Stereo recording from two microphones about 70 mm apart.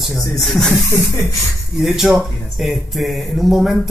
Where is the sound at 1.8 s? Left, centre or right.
Centre.